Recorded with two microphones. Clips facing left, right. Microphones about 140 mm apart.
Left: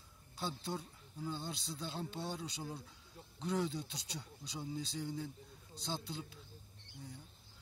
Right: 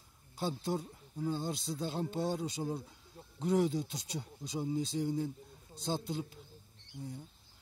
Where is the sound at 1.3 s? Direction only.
45° right (ahead or behind).